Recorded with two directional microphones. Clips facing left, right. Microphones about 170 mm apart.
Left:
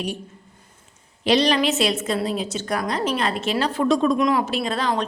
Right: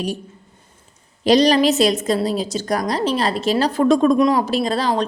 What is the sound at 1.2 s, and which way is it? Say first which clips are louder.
A woman's voice: right 5 dB; 40° right (ahead or behind).